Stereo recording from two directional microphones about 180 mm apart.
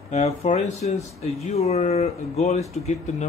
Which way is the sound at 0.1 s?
40° left (ahead or behind).